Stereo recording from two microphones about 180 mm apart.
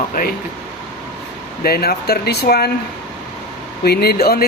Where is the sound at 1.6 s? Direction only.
60° left (ahead or behind).